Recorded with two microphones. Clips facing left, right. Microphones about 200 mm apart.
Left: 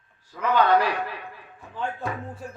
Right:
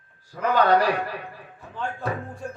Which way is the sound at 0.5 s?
40° right (ahead or behind).